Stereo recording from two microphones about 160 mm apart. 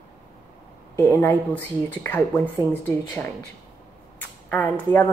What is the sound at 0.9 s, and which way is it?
Speech, 15° left (ahead or behind).